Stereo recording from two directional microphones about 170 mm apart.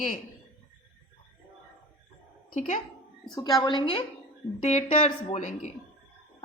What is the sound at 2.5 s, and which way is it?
Speech, 50° left (ahead or behind).